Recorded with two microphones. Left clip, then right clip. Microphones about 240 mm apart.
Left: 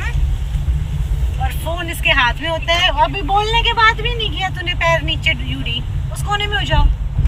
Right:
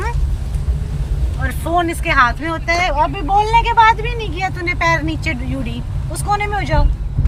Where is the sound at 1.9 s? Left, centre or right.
Centre.